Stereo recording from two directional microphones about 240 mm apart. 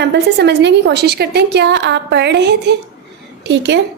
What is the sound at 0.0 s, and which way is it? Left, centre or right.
A woman's voice, right.